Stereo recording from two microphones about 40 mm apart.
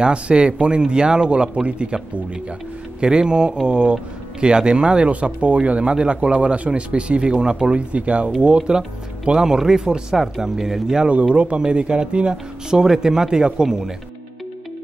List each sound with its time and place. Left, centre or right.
0.0 s speech: right
3.0 s speech: right
11.1 s speech: right
12.6 s speech: centre